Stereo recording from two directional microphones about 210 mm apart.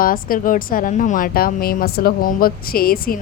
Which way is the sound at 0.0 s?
40° left (ahead or behind).